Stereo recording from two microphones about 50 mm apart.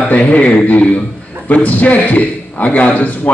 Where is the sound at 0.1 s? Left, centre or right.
Left.